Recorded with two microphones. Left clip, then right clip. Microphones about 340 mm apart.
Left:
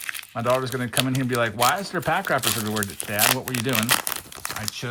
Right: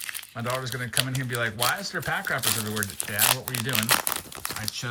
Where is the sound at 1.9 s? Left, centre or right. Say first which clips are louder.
Left 5 dB; left.